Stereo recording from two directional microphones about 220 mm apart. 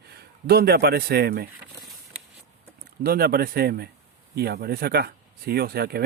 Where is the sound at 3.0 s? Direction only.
45° right (ahead or behind).